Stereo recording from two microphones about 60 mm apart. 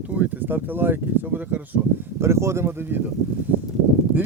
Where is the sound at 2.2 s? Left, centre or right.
Right.